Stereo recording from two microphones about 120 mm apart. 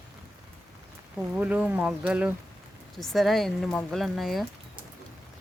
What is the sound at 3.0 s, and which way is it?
Speech, centre (ahead or behind).